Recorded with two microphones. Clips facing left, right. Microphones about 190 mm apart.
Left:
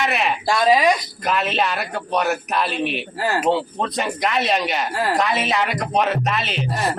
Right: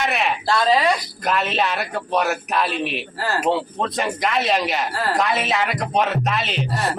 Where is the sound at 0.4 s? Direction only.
15° left (ahead or behind).